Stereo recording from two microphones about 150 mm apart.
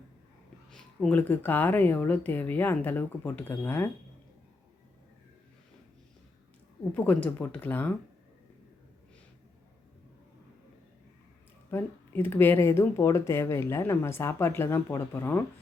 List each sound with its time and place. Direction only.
0.7 s speech: 10° left (ahead or behind)
6.9 s speech: 10° left (ahead or behind)
11.7 s speech: 15° left (ahead or behind)